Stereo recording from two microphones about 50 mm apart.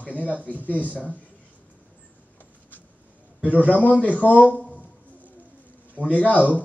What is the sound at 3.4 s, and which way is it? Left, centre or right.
Speech, right.